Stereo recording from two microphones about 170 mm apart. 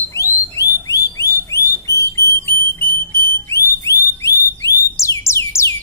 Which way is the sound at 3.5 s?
15° left (ahead or behind).